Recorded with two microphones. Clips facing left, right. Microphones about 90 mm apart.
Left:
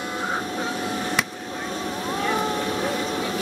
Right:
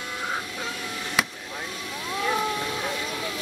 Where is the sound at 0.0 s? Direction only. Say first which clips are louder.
Left 4 dB; 30° left (ahead or behind).